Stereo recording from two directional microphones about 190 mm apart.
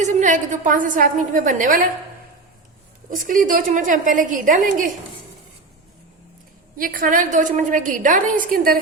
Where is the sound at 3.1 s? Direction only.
45° right (ahead or behind).